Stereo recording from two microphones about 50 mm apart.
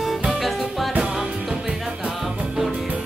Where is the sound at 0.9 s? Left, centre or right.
Centre.